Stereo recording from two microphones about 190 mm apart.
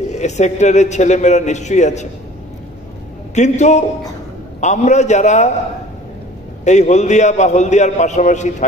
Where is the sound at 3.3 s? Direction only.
35° left (ahead or behind).